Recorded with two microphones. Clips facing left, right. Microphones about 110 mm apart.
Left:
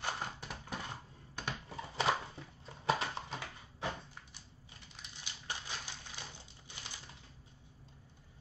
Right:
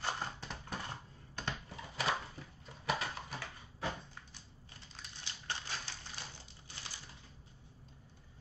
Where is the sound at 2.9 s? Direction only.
30° left (ahead or behind).